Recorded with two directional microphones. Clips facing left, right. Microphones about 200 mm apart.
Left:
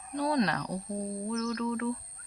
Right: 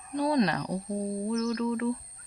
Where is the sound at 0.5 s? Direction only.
20° right (ahead or behind).